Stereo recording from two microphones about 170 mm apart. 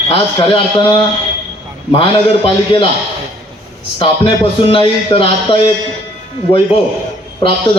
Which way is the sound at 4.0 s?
30° left (ahead or behind).